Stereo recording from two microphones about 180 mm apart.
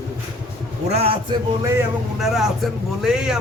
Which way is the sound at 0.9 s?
35° right (ahead or behind).